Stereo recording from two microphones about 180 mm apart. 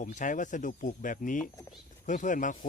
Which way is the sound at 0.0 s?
45° left (ahead or behind).